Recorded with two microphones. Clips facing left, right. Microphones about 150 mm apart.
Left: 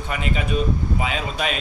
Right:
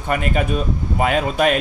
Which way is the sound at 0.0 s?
50° right (ahead or behind).